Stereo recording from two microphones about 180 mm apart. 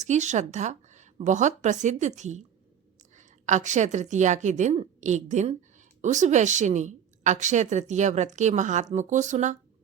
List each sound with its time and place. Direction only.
0.0 s a woman's voice: 40° right (ahead or behind)